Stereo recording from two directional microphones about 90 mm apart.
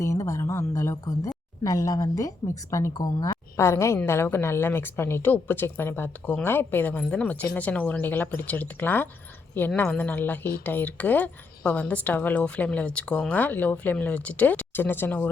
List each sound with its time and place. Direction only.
0.0 s a woman's voice: 35° left (ahead or behind)